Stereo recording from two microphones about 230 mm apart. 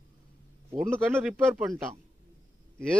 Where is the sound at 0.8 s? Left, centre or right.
Centre.